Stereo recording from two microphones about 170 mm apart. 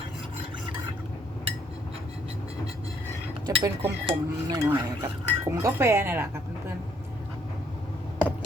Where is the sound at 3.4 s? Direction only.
30° right (ahead or behind).